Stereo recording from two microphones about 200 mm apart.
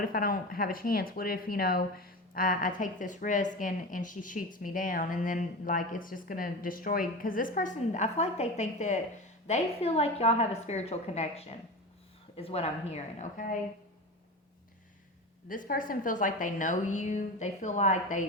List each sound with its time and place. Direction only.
0.0 s a woman's voice: 45° left (ahead or behind)
15.4 s a woman's voice: 45° left (ahead or behind)